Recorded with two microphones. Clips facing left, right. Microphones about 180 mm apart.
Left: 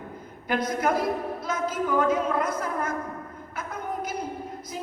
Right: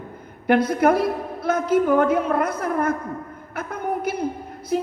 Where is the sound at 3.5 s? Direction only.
60° right (ahead or behind).